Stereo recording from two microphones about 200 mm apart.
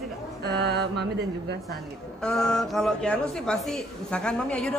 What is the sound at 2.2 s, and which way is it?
A woman's voice, 5° left (ahead or behind).